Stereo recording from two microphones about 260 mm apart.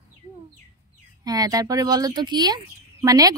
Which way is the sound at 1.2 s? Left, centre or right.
Centre.